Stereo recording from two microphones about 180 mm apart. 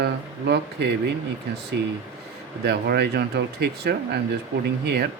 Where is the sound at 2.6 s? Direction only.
65° right (ahead or behind).